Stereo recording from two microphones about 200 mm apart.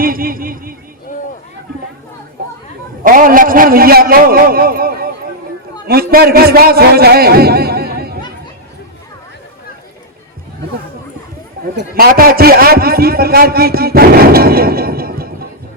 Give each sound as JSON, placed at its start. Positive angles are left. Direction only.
{"t": 0.0, "sound": "a sound", "side_deg": -45}
{"t": 3.0, "sound": "a man's voice", "side_deg": -45}
{"t": 11.9, "sound": "a man's voice", "side_deg": -45}